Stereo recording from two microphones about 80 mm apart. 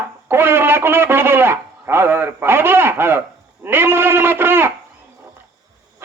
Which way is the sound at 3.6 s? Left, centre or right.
Right.